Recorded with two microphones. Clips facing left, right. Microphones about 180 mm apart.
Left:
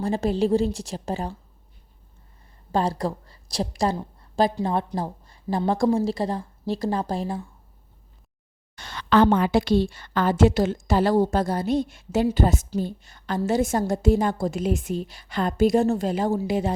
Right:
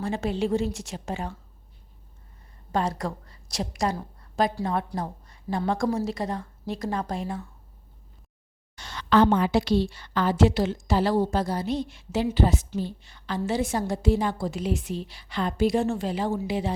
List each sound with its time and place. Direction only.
0.0 s a woman's voice: 35° left (ahead or behind)
2.7 s a woman's voice: 30° left (ahead or behind)
8.7 s a woman's voice: 55° left (ahead or behind)